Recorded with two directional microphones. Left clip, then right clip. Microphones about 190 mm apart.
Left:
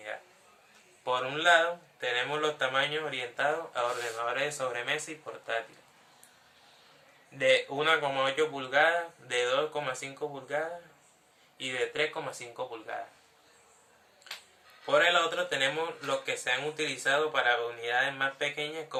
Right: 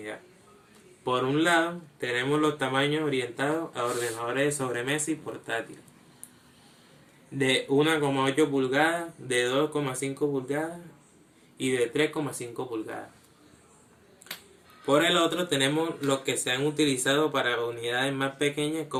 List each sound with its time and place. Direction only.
1.3 s speech: 10° left (ahead or behind)
7.3 s speech: 10° left (ahead or behind)
14.8 s speech: 10° left (ahead or behind)